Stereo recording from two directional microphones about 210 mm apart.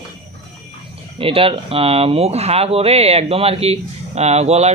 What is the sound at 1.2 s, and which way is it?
Speech, 25° right (ahead or behind).